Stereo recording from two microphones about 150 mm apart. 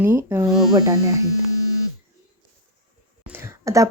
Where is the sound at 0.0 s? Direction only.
15° right (ahead or behind).